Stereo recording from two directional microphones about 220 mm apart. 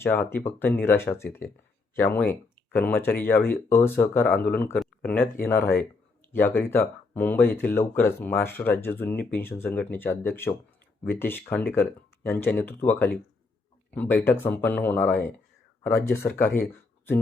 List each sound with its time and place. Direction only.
0.0 s speech: 10° left (ahead or behind)